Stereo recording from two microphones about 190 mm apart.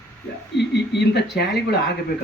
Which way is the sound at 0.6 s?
60° left (ahead or behind).